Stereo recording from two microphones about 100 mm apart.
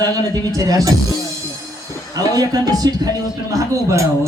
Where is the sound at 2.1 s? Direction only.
40° right (ahead or behind).